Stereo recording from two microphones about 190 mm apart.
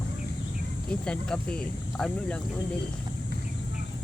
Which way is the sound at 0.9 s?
5° left (ahead or behind).